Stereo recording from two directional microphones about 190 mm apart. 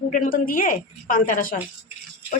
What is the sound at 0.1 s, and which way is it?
A woman's voice, 45° left (ahead or behind).